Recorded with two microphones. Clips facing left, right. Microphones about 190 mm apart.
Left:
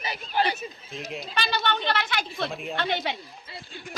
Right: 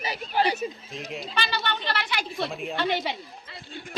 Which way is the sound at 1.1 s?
5° right (ahead or behind).